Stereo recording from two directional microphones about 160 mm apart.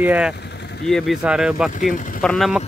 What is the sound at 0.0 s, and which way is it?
Speech, 10° right (ahead or behind).